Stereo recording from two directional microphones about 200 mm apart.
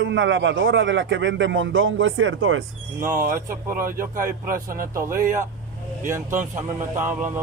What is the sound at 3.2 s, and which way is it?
A man's voice, 40° right (ahead or behind).